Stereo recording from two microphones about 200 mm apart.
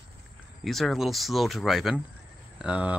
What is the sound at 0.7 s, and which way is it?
Speech, centre (ahead or behind).